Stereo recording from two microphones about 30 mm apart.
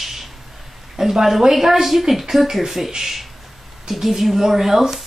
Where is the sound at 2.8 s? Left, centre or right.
Centre.